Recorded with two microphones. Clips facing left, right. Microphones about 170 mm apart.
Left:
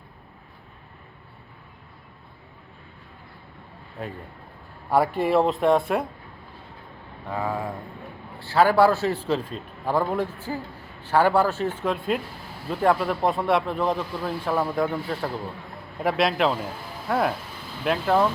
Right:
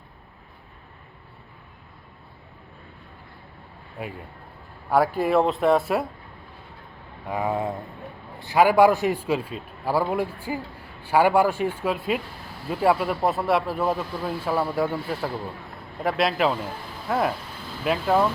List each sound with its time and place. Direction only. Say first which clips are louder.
4.0 s a man's voice: even; 10° right (ahead or behind)
7.3 s a man's voice: right 3 dB; 20° right (ahead or behind); by 18.3 s 5° right (ahead or behind)